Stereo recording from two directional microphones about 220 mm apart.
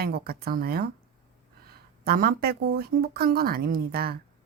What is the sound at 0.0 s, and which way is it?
Speech, 45° right (ahead or behind).